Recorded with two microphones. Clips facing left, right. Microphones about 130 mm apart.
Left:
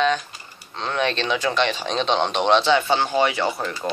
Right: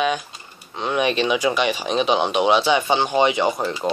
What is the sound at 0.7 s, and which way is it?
Speech, 15° right (ahead or behind).